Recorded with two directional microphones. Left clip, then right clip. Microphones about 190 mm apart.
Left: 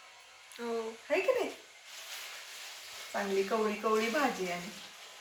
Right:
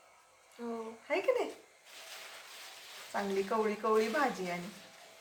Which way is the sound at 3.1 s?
15° right (ahead or behind).